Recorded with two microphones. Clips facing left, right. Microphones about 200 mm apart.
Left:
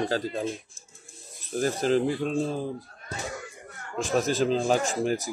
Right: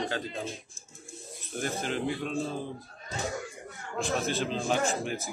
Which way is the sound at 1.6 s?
35° left (ahead or behind).